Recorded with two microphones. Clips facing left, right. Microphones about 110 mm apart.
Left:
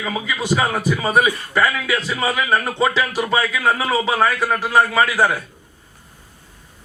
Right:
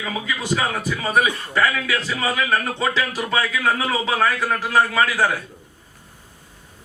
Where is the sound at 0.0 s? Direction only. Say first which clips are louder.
Left 3 dB; 25° left (ahead or behind).